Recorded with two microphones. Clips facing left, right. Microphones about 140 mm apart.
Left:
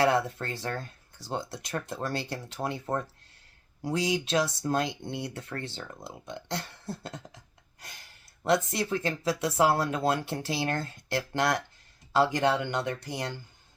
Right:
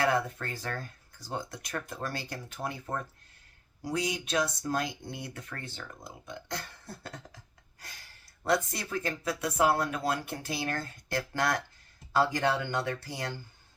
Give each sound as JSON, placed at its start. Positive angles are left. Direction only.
{"t": 0.0, "sound": "speech", "side_deg": 25}
{"t": 3.8, "sound": "speech", "side_deg": 25}